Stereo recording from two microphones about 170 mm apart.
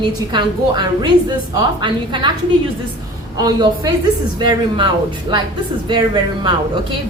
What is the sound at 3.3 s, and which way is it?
A woman's voice, 25° right (ahead or behind).